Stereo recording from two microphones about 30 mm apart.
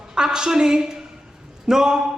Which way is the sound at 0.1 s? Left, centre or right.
Right.